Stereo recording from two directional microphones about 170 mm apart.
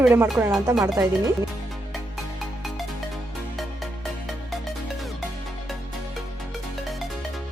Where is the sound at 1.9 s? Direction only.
Centre (ahead or behind).